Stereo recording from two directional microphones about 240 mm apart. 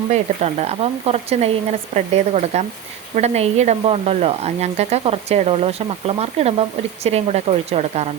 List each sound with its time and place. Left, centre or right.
0.1 s speech: right